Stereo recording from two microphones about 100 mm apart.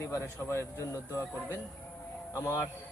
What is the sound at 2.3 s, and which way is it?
Speech, 25° left (ahead or behind).